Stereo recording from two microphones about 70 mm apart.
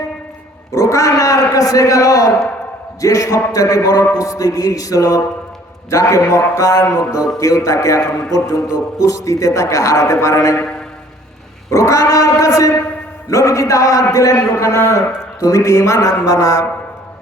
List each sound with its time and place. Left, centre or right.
0.7 s a man's voice: left
11.7 s a man's voice: left